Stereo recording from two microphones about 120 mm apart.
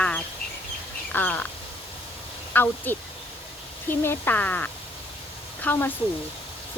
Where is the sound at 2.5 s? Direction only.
15° left (ahead or behind).